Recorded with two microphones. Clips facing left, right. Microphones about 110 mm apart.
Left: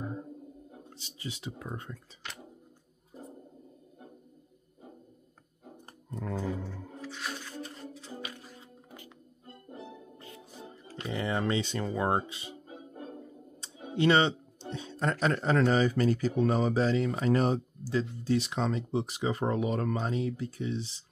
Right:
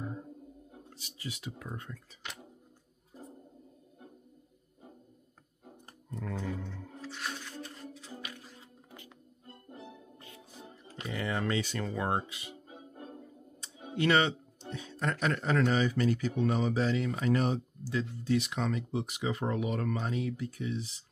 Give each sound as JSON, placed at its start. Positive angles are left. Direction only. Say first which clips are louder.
{"t": 0.8, "sound": "speech", "louder": "left 1 dB", "side_deg": 25}
{"t": 5.9, "sound": "roaring cats", "louder": "left 3 dB", "side_deg": 30}
{"t": 6.6, "sound": "music", "louder": "left 2 dB", "side_deg": 10}
{"t": 7.1, "sound": "music", "louder": "left 1 dB", "side_deg": 0}
{"t": 7.9, "sound": "music", "louder": "left 3 dB", "side_deg": 30}
{"t": 11.1, "sound": "speech", "louder": "left 3 dB", "side_deg": 25}
{"t": 13.6, "sound": "speech", "louder": "left 3 dB", "side_deg": 25}